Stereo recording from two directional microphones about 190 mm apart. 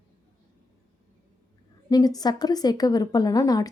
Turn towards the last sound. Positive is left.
turn(degrees=20)  # may be behind; listen again after turning